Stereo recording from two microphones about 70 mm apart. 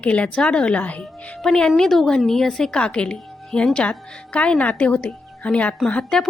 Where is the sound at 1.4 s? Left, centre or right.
Centre.